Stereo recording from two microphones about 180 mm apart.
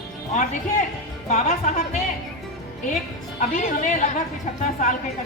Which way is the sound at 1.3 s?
40° left (ahead or behind).